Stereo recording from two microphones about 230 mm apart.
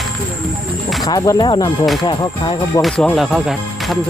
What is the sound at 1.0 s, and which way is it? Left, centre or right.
Speech, centre.